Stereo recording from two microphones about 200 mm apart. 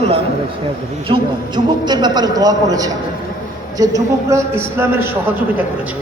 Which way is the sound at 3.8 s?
15° right (ahead or behind).